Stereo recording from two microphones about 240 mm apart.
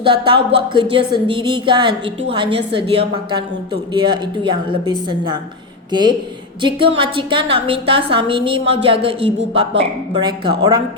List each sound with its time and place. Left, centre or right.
0.0 s a woman's voice: right